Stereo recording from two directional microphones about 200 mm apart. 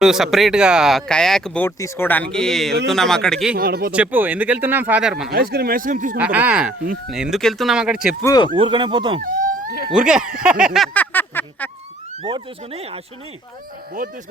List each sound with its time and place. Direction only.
0.0 s speech: centre (ahead or behind)
3.5 s speech: 50° right (ahead or behind)
3.9 s speech: 10° right (ahead or behind)
5.3 s speech: 50° right (ahead or behind)
6.1 s speech: 10° right (ahead or behind)
8.2 s a sound: 15° left (ahead or behind)
8.5 s speech: 25° right (ahead or behind)
9.2 s speech: 45° right (ahead or behind)
9.9 s speech: 5° right (ahead or behind)
10.8 s a sound: 10° left (ahead or behind)
12.2 s speech: 30° right (ahead or behind)